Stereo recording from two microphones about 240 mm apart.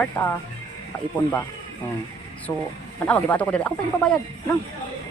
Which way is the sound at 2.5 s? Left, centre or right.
Centre.